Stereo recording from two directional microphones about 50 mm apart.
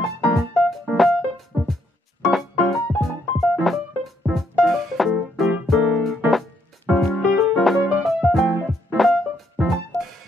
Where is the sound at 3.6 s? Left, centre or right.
Centre.